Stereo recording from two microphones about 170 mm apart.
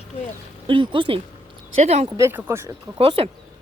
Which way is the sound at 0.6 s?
30° right (ahead or behind).